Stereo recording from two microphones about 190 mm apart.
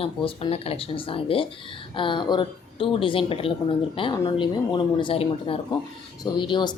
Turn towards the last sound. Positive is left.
turn(degrees=25)  # may be behind; listen again after turning